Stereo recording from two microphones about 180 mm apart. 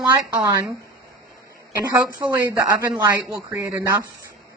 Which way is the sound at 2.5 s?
5° right (ahead or behind).